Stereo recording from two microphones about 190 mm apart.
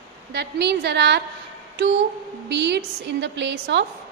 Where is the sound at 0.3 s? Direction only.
60° right (ahead or behind).